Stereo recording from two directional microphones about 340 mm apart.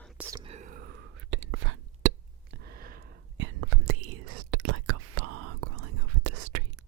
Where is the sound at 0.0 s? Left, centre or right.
Centre; by 0.9 s right.